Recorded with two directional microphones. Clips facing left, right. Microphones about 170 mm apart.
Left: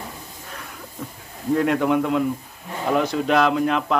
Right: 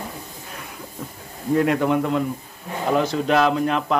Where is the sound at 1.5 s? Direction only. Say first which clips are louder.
Even; centre (ahead or behind).